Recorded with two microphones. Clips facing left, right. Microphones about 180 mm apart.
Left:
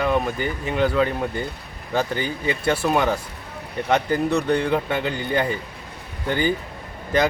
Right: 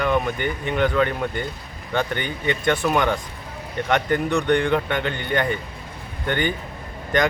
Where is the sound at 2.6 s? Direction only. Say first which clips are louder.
Even; 5° left (ahead or behind).